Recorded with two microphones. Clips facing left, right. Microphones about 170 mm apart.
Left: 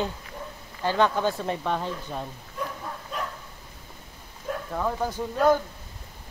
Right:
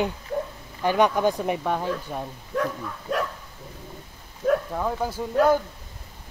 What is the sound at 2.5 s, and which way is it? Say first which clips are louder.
Bow-wow: right 8 dB; 90° right.